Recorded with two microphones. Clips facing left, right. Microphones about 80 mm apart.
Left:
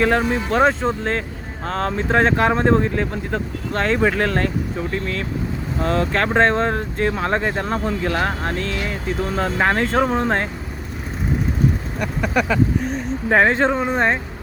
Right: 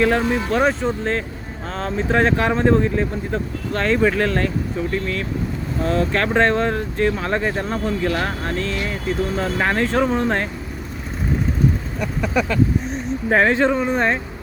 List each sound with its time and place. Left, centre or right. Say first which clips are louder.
0.5 s speech: left 3 dB; left
3.8 s speech: even; left
11.9 s speech: even; centre
13.3 s speech: even; left